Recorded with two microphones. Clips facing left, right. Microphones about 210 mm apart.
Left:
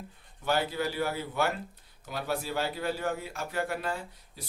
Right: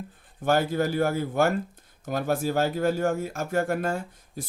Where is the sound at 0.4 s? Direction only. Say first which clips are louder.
Right 6 dB; 45° right (ahead or behind).